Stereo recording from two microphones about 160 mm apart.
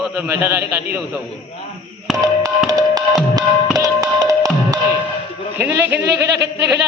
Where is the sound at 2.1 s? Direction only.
20° right (ahead or behind).